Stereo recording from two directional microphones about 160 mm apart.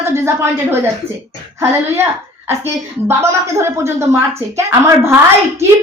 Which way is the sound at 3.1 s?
15° right (ahead or behind).